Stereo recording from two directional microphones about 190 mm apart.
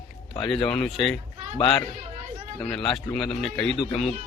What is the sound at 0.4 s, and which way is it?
Speech, centre (ahead or behind).